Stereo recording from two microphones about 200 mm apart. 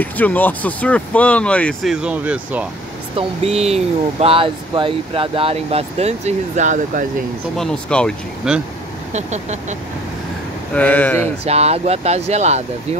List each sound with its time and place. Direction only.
0.0 s speech: 10° left (ahead or behind)
3.2 s speech: 30° right (ahead or behind)
7.5 s speech: 5° left (ahead or behind)
9.1 s speech: 35° right (ahead or behind)
10.7 s speech: 10° left (ahead or behind)
11.4 s speech: 30° right (ahead or behind)